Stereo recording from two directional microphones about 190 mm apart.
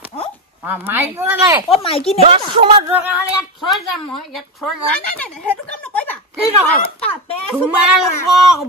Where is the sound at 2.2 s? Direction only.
30° right (ahead or behind).